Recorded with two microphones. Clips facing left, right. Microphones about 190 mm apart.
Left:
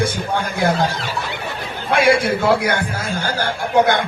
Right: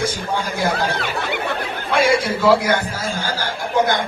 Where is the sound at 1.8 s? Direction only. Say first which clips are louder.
Left 2 dB; 60° left (ahead or behind).